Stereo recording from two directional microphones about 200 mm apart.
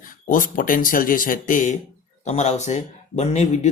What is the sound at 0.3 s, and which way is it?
Speech, 40° left (ahead or behind).